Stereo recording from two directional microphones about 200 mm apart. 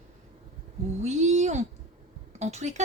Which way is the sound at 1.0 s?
35° right (ahead or behind).